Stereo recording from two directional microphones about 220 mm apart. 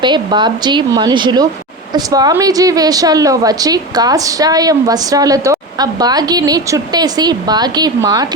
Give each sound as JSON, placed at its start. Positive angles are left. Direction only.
{"t": 0.0, "sound": "a woman's voice", "side_deg": -20}